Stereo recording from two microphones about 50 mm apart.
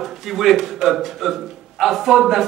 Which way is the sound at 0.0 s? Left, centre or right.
Centre.